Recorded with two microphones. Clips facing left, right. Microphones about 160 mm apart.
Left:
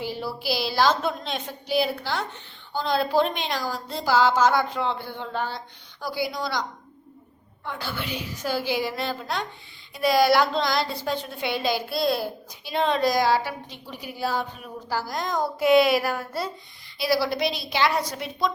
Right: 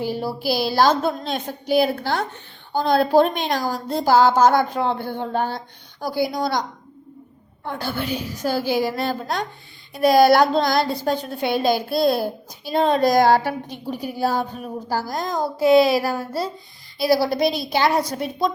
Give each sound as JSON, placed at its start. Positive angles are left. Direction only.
{"t": 0.0, "sound": "a woman's voice", "side_deg": -45}